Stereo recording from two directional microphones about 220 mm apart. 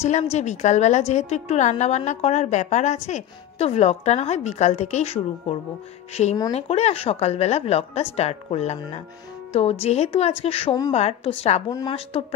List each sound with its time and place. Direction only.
0.0 s a woman's voice: 30° left (ahead or behind)